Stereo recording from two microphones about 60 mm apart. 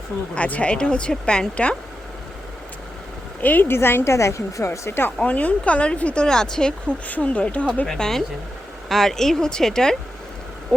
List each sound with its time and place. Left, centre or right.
0.3 s a woman's voice: left
3.4 s a woman's voice: left
5.2 s speech: left
7.9 s a woman's voice: centre